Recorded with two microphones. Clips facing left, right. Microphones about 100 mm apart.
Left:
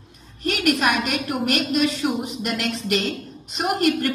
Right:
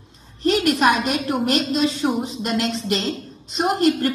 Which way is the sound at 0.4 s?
25° right (ahead or behind).